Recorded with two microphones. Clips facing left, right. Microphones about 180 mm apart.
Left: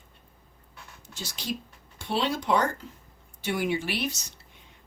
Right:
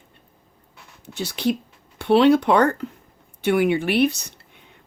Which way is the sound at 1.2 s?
65° right (ahead or behind).